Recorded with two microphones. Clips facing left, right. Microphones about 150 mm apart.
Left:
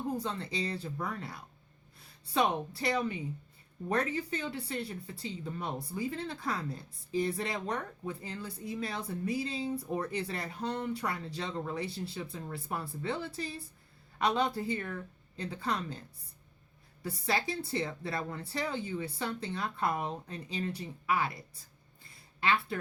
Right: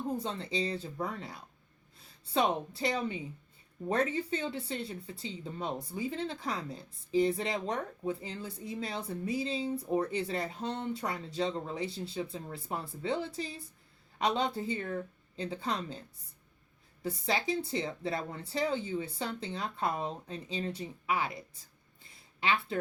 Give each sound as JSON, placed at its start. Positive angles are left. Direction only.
{"t": 0.2, "sound": "speech", "side_deg": -25}
{"t": 17.0, "sound": "speech", "side_deg": -20}